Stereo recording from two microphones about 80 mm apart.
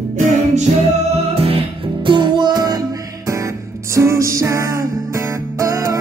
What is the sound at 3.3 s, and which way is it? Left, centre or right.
Music, right.